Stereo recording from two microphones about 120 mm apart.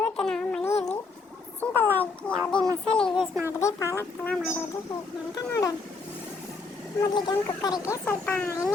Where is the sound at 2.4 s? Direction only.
5° left (ahead or behind).